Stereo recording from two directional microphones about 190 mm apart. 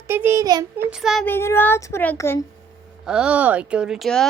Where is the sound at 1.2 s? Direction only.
10° left (ahead or behind).